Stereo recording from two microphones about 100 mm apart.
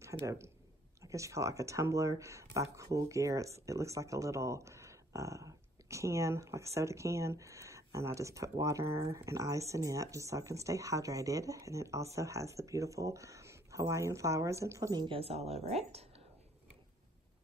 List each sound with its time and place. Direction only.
0.2 s speech: 25° right (ahead or behind)
15.0 s a woman's voice: 65° right (ahead or behind); by 16.1 s 90° right